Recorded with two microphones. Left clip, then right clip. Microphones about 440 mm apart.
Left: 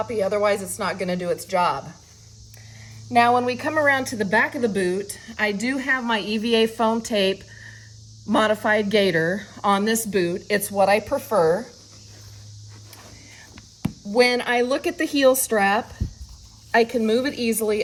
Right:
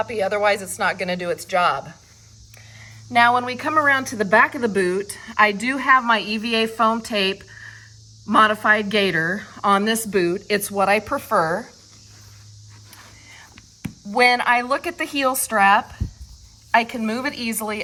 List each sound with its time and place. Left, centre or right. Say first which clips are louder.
0.0 s speech: right 1 dB; centre
2.8 s speech: right 2 dB; centre
9.6 s a woman's voice: right 3 dB; right
9.8 s speech: right 2 dB; centre
14.2 s speech: right 2 dB; centre